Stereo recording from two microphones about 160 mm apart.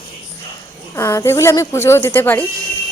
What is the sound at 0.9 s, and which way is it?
A woman's voice, 20° left (ahead or behind).